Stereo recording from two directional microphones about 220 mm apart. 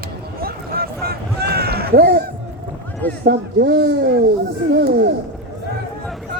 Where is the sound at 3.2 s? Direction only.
45° right (ahead or behind).